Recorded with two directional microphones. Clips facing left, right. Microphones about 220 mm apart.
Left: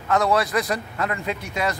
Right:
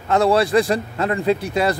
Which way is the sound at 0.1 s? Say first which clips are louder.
Right 5 dB; 30° right (ahead or behind).